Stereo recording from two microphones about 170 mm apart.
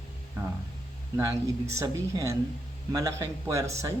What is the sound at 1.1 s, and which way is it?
Speech, 15° right (ahead or behind).